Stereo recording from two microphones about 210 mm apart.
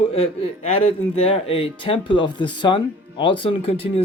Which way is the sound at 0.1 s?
30° left (ahead or behind).